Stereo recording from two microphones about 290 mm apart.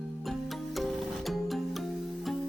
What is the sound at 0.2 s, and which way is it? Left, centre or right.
Music, centre.